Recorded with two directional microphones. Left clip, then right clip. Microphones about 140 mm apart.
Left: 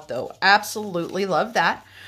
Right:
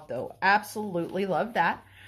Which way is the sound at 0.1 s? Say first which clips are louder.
Left 6 dB; 20° left (ahead or behind).